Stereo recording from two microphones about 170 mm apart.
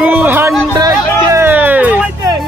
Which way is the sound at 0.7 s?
20° right (ahead or behind).